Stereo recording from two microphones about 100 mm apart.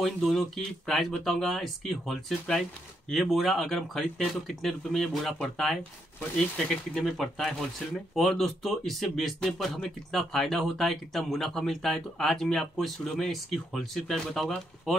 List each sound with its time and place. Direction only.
0.0 s speech: centre (ahead or behind)